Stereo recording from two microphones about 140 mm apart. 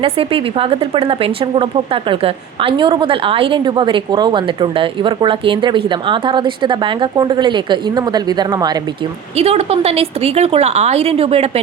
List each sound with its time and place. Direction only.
0.0 s speech: 40° right (ahead or behind)
9.3 s a woman's voice: 45° right (ahead or behind)